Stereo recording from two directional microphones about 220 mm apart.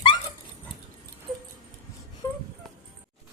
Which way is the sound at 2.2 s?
10° left (ahead or behind).